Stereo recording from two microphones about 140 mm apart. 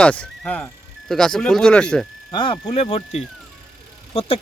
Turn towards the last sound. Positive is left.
turn(degrees=45)  # may be behind; listen again after turning